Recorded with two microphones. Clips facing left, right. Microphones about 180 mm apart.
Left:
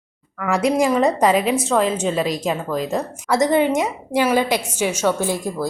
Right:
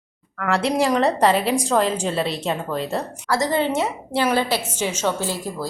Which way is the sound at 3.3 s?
20° left (ahead or behind).